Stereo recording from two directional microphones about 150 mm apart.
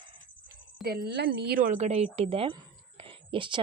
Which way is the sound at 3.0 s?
35° right (ahead or behind).